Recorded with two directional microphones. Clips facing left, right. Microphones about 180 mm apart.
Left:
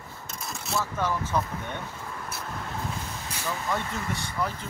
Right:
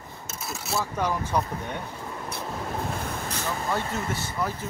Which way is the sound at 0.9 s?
15° right (ahead or behind).